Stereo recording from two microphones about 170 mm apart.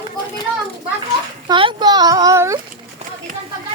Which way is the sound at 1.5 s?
30° right (ahead or behind).